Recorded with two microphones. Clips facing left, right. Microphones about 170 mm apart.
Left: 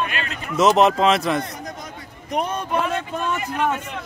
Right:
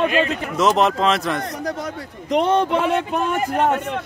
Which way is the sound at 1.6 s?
75° right (ahead or behind).